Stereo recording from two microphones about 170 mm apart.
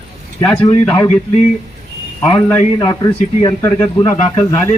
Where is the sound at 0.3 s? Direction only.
10° left (ahead or behind).